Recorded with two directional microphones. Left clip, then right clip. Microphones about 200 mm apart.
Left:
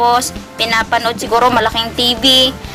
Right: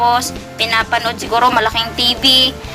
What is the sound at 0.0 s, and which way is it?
Speech, 35° left (ahead or behind).